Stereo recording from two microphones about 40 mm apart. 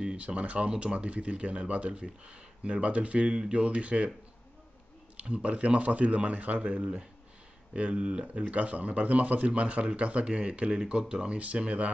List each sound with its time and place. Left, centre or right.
0.0 s speech: right
5.1 s speech: right
7.7 s speech: right